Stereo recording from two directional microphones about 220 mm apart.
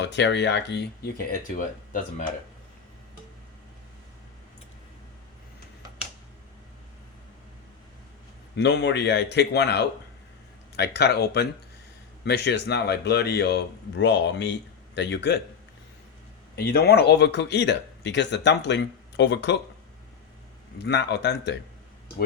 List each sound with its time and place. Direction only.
0.0 s speech: 55° left (ahead or behind); by 2.2 s 35° left (ahead or behind)
8.5 s speech: 50° left (ahead or behind)
16.6 s speech: 45° left (ahead or behind)
20.7 s speech: 50° left (ahead or behind)